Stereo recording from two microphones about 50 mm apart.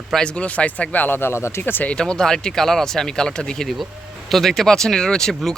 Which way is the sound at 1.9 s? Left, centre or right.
Centre.